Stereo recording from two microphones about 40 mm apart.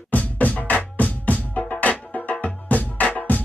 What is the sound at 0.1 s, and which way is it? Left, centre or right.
Music, left.